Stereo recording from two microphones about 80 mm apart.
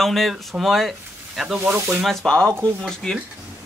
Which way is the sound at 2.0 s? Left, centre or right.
Centre.